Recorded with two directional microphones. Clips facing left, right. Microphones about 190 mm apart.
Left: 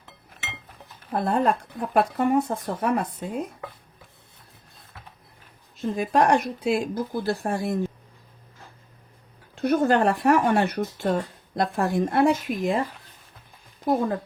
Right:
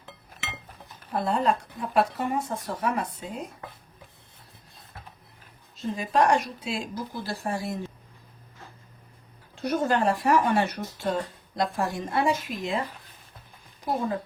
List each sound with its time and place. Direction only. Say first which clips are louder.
1.1 s a woman's voice: left 2 dB; 55° left (ahead or behind)
5.7 s a woman's voice: left 3 dB; 55° left (ahead or behind)
9.6 s speech: left 5 dB; 55° left (ahead or behind)